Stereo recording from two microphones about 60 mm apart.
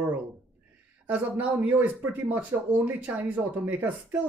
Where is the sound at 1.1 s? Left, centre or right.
Right.